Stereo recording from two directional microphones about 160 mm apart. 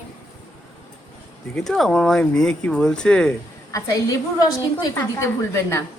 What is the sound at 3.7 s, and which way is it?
A woman's voice, 20° left (ahead or behind).